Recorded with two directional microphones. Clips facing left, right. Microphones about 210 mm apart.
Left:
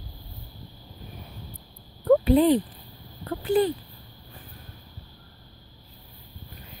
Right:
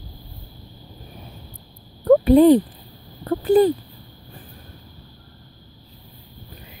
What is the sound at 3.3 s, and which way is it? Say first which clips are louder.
Speech: right 7 dB; 40° right (ahead or behind).